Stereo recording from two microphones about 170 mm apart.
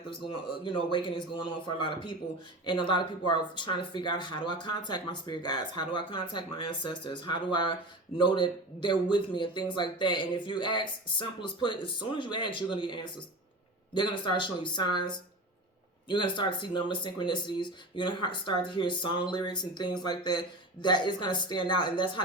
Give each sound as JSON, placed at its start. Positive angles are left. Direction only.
{"t": 0.1, "sound": "speech", "side_deg": 30}